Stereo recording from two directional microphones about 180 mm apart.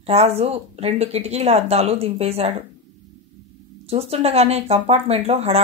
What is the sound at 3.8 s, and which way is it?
Speech, 35° right (ahead or behind).